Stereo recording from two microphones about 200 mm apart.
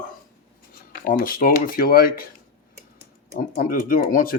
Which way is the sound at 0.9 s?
50° left (ahead or behind).